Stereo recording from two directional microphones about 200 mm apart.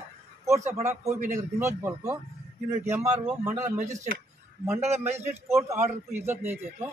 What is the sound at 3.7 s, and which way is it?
Speech, 35° right (ahead or behind).